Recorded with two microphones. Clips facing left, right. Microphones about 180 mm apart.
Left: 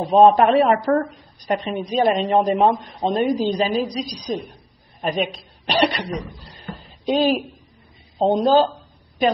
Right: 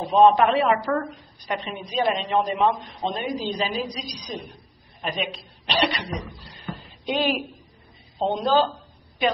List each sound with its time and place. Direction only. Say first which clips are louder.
0.1 s a woman's voice: left 3 dB; 45° left (ahead or behind)
6.5 s a sound: even; 40° left (ahead or behind)
8.2 s speech: left 5 dB; 40° left (ahead or behind)